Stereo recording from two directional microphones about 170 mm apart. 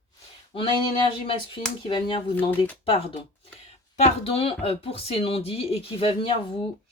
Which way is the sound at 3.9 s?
40° left (ahead or behind).